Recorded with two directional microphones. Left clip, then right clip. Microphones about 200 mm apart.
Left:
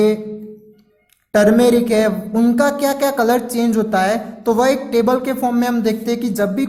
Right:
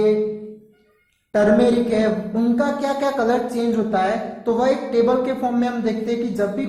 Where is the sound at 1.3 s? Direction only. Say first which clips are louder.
Left 4 dB; 30° left (ahead or behind).